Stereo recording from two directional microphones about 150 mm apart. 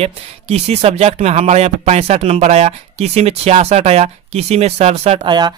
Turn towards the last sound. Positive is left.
turn(degrees=-30)  # may be behind; listen again after turning